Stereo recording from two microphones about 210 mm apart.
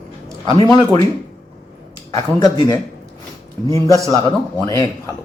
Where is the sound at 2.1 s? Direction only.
20° left (ahead or behind).